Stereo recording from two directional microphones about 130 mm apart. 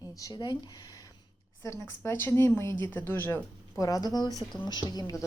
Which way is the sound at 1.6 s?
20° left (ahead or behind).